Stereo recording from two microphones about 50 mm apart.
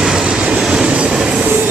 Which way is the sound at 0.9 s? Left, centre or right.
Right.